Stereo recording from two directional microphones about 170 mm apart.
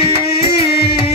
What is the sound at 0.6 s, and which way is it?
Music, 70° left (ahead or behind).